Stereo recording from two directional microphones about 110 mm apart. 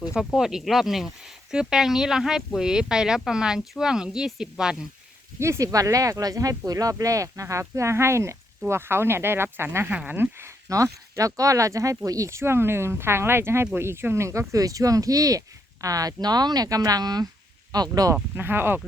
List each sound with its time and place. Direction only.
0.3 s speech: 5° right (ahead or behind)
5.4 s speech: 25° right (ahead or behind)
18.3 s speech: 20° right (ahead or behind)